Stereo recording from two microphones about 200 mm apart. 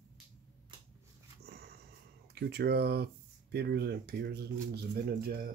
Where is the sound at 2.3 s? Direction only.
55° right (ahead or behind).